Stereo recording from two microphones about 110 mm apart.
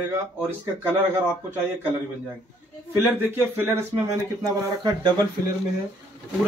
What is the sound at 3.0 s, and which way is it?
A man's voice, 15° right (ahead or behind).